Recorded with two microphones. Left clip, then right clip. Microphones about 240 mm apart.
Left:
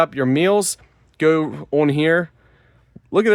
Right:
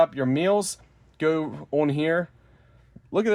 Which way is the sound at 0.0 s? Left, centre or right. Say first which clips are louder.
Left 4 dB; left.